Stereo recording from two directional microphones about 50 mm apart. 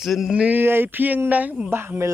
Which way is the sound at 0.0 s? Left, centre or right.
Centre.